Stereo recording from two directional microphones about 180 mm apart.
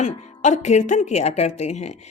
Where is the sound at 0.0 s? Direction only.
40° left (ahead or behind).